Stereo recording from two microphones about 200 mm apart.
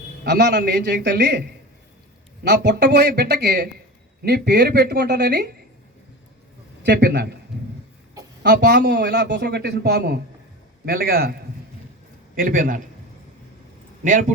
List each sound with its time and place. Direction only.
0.3 s a man's voice: 60° right (ahead or behind); by 1.0 s 45° right (ahead or behind)
1.0 s speech: 60° right (ahead or behind)
6.8 s speech: 60° right (ahead or behind)
8.4 s a man's voice: 60° right (ahead or behind)
12.4 s a man's voice: 45° right (ahead or behind)
14.0 s speech: 40° right (ahead or behind)